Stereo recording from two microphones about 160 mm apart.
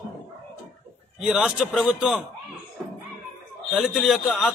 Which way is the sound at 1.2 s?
5° right (ahead or behind).